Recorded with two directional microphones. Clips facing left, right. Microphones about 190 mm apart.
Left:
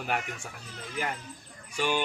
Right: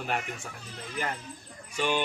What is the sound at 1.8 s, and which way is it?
Speech, 10° left (ahead or behind).